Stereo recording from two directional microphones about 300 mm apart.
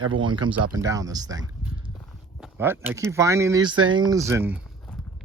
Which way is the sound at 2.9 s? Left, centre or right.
Centre.